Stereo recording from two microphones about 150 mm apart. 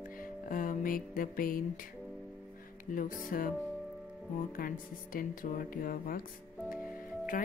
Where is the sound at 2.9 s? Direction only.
65° left (ahead or behind).